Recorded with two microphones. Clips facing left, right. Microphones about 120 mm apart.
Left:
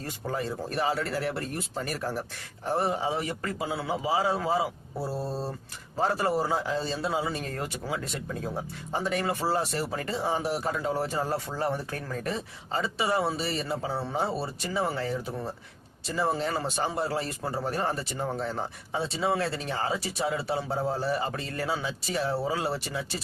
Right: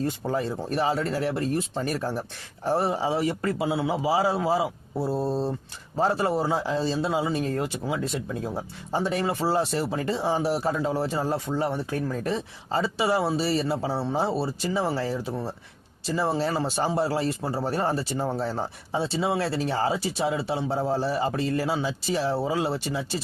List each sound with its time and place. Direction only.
0.0 s a man's voice: 30° right (ahead or behind)